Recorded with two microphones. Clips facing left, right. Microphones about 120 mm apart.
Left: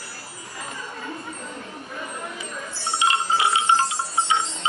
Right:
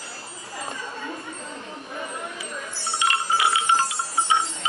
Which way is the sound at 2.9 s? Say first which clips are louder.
Left 2 dB; 25° left (ahead or behind).